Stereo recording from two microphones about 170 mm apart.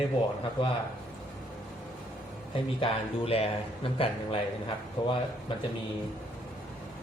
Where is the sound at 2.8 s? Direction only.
35° left (ahead or behind).